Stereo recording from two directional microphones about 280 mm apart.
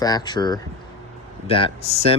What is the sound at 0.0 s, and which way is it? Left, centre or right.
Speech, centre.